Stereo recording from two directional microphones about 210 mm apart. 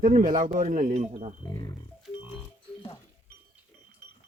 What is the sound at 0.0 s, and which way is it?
Speech, 40° right (ahead or behind).